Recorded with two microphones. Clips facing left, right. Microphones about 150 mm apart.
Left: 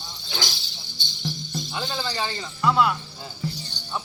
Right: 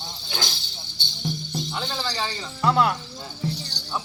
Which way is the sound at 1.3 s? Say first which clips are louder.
Right 3 dB; 55° right (ahead or behind).